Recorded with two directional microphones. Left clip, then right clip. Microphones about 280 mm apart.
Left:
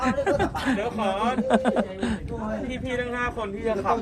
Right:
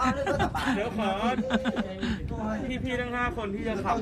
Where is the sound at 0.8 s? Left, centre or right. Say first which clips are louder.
Left 3 dB; centre.